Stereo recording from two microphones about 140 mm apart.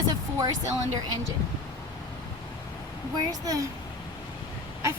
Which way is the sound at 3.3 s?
25° right (ahead or behind).